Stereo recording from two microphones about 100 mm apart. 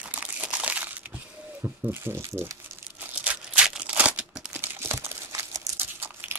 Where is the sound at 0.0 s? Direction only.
15° right (ahead or behind).